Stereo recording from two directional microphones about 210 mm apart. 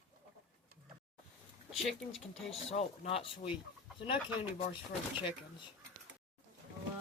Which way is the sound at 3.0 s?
25° left (ahead or behind).